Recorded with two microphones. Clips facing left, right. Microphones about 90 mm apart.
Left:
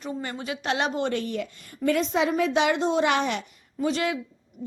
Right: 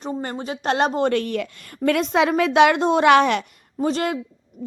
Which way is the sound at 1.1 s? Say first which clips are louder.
Right 6 dB; 65° right (ahead or behind).